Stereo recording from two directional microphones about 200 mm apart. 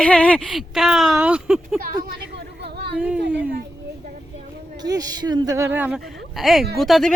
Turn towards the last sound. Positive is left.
turn(degrees=0)  # may be behind; listen again after turning